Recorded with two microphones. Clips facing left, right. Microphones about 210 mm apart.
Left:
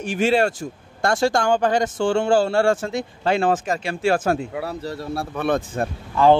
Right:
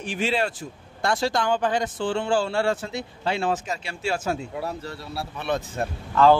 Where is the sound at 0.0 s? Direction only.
45° left (ahead or behind).